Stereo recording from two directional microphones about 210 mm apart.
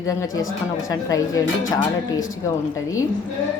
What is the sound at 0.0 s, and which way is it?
Speech, 15° left (ahead or behind).